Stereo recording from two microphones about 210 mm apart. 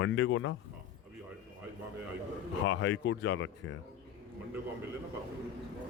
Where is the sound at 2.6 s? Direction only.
65° left (ahead or behind).